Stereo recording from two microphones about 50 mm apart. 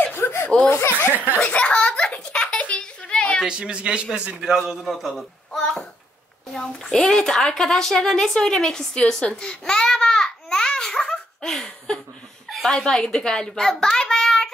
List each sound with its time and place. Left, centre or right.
0.2 s laughter: left
0.7 s speech: left
1.1 s speech: right
1.4 s giggle: left
2.8 s a sound: centre
3.4 s a man's voice: centre
4.8 s a man's voice: centre
5.6 s a sound: centre
6.5 s a woman's voice: centre
12.4 s a sound: centre
12.7 s a woman's voice: centre
13.9 s child singing: centre